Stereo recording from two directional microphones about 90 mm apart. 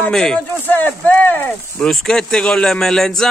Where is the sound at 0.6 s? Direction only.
20° left (ahead or behind).